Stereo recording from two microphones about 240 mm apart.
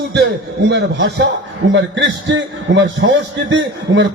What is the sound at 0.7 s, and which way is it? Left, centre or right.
A man's voice, right.